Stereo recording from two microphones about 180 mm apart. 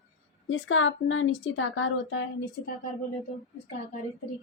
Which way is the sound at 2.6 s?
55° left (ahead or behind).